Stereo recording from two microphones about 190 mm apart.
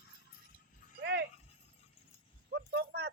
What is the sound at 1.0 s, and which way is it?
Dog, 65° right (ahead or behind).